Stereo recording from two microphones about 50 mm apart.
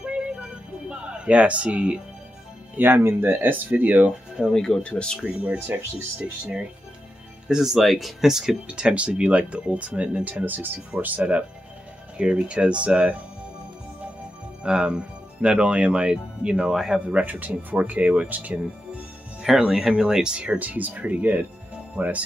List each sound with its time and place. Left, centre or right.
0.0 s music: centre
2.7 s speech: right
4.6 s speech: centre
4.8 s speech: left
5.2 s speech: right
7.4 s speech: centre
8.6 s speech: right
10.4 s speech: right
11.1 s speech: right
14.6 s speech: centre
17.0 s speech: right
19.7 s speech: centre
20.5 s speech: right